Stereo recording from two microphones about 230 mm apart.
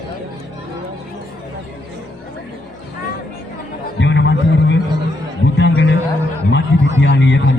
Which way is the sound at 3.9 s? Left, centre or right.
Left.